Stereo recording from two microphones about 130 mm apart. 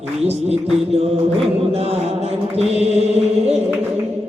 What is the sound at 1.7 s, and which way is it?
Music, 50° right (ahead or behind).